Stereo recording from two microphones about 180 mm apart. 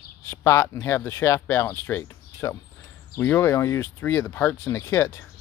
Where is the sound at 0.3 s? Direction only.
15° left (ahead or behind).